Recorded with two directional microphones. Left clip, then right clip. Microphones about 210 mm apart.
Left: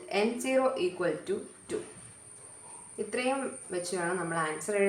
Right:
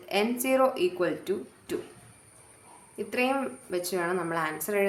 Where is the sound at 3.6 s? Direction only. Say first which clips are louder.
Right 2 dB; 45° right (ahead or behind).